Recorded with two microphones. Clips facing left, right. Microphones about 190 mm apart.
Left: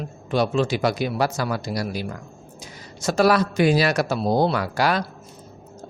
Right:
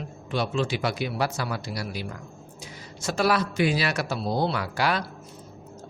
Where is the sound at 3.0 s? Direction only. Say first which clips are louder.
Left 6 dB; 40° left (ahead or behind).